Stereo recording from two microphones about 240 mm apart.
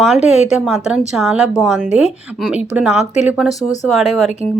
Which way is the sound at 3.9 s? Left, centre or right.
Centre.